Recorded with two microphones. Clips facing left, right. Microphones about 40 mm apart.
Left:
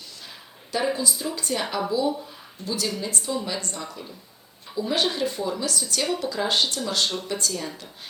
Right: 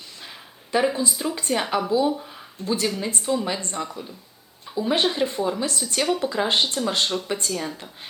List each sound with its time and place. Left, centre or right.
0.9 s speech: right